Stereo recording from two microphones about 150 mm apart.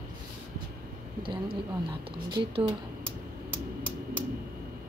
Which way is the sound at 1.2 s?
35° right (ahead or behind).